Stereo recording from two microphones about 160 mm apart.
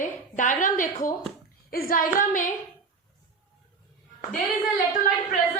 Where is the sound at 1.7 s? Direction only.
65° left (ahead or behind).